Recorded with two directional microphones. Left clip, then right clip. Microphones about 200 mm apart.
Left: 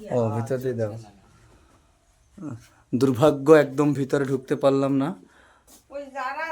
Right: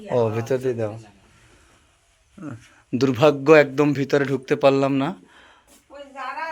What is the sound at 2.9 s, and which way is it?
A man's voice, 15° left (ahead or behind).